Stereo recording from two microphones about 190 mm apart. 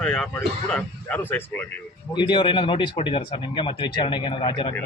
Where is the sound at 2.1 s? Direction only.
25° left (ahead or behind).